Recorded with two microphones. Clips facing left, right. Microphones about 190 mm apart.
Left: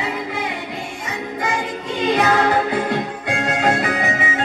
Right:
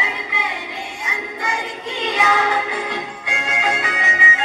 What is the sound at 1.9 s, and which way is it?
Music, 55° left (ahead or behind).